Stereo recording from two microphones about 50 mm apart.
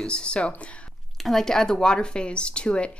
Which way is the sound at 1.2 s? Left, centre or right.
Centre.